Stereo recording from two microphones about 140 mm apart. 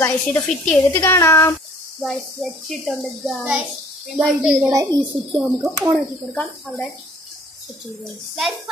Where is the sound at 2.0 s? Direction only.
Centre (ahead or behind).